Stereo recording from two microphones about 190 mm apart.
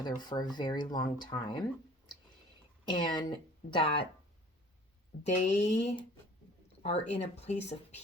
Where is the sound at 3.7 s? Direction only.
30° left (ahead or behind).